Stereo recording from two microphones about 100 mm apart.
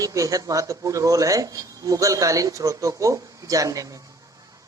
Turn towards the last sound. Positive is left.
turn(degrees=-35)  # may be behind; listen again after turning